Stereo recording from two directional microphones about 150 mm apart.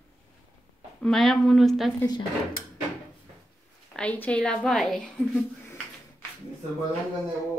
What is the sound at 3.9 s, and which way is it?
A woman's voice, 10° left (ahead or behind).